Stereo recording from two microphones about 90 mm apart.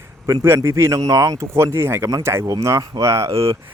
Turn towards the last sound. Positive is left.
turn(degrees=-35)  # may be behind; listen again after turning